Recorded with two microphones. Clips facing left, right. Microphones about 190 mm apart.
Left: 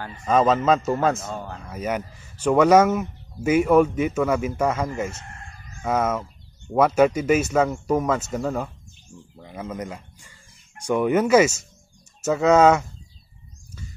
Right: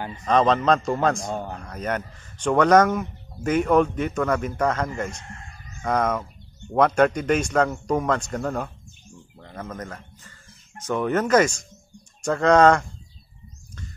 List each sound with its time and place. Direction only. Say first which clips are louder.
0.2 s speech: left 1 dB; 5° left (ahead or behind)
1.2 s speech: right 3 dB; 15° right (ahead or behind)
1.6 s speech: left 1 dB; 5° left (ahead or behind)